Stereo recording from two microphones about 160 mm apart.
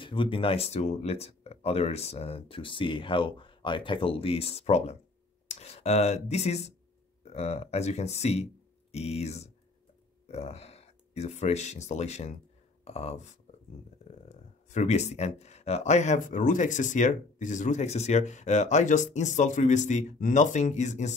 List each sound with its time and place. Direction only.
0.0 s speech: 30° left (ahead or behind)
14.3 s speech: 45° left (ahead or behind)